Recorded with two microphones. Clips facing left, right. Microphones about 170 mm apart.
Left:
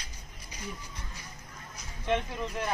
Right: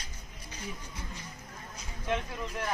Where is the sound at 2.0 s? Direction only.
Centre (ahead or behind).